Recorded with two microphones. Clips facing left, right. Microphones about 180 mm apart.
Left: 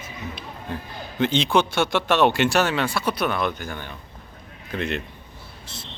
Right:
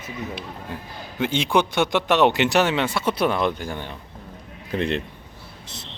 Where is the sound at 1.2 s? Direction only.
10° right (ahead or behind); by 5.0 s 30° right (ahead or behind).